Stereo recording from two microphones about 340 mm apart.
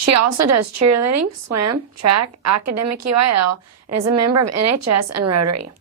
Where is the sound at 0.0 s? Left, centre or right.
Right.